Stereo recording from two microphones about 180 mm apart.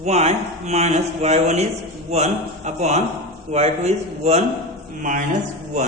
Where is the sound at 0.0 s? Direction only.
35° right (ahead or behind).